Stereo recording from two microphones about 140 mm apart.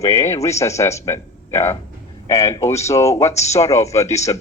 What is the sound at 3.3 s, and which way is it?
Speech, 50° left (ahead or behind).